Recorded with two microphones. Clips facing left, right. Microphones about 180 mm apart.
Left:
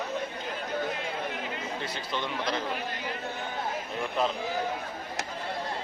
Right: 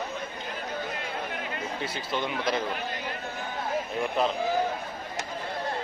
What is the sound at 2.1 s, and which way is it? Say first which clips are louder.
Speech: right 3 dB; 10° right (ahead or behind).